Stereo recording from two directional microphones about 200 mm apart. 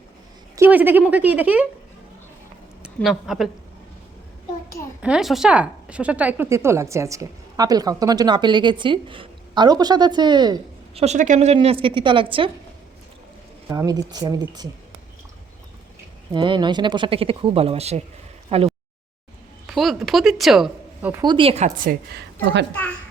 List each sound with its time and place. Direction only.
0.5 s a woman's voice: 10° right (ahead or behind)
2.8 s a woman's voice: 5° right (ahead or behind)
5.0 s speech: centre (ahead or behind); by 11.0 s 20° right (ahead or behind)
11.0 s speech: 35° right (ahead or behind)
13.7 s speech: 20° right (ahead or behind)
16.3 s speech: 25° right (ahead or behind)
19.6 s a woman's voice: centre (ahead or behind)
21.1 s speech: 20° right (ahead or behind)
21.8 s a woman's voice: 55° right (ahead or behind)